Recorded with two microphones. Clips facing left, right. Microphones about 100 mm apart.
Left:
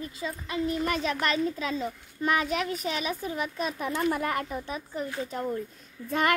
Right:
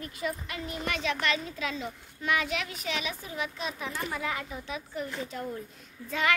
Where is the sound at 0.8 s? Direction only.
40° left (ahead or behind).